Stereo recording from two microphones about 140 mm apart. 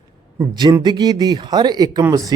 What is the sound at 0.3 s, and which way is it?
A man's voice, 30° right (ahead or behind).